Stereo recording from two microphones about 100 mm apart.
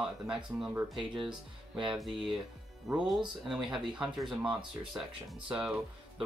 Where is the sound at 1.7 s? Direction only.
5° right (ahead or behind).